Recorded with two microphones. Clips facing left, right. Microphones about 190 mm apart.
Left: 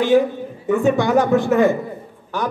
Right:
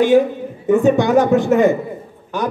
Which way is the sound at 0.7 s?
20° right (ahead or behind).